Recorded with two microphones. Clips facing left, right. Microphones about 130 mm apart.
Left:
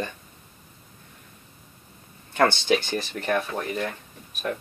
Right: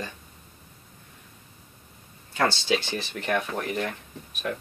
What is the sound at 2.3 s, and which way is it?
Speech, 55° left (ahead or behind).